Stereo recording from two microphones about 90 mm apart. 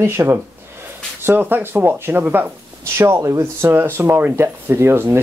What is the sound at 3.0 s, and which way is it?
Speech, 35° right (ahead or behind).